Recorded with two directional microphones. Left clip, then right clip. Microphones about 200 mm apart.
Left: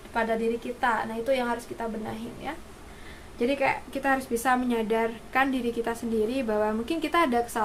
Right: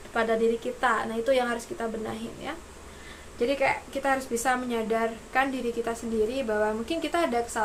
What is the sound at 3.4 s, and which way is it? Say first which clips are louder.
A woman's voice: even; 15° left (ahead or behind).